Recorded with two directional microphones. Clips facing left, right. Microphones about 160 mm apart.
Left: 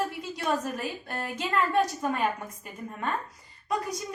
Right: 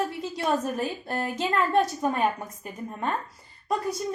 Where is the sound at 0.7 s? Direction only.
40° right (ahead or behind).